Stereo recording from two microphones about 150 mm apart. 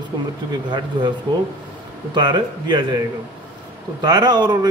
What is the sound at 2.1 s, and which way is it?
Speech, 30° right (ahead or behind).